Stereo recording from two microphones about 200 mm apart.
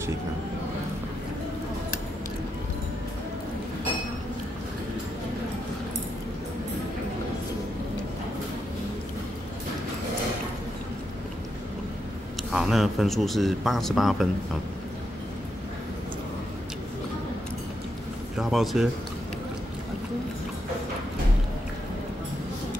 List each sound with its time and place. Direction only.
12.5 s speech: centre (ahead or behind)
18.4 s speech: centre (ahead or behind)